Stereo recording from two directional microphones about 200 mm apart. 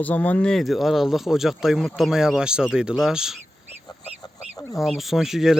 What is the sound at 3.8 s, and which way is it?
Fowl, 20° left (ahead or behind).